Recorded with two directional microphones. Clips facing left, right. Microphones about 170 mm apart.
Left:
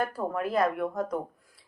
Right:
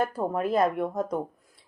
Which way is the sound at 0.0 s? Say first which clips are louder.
Right 3 dB; 25° right (ahead or behind).